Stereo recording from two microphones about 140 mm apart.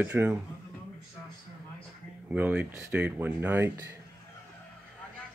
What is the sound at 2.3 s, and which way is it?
Speech, 10° right (ahead or behind).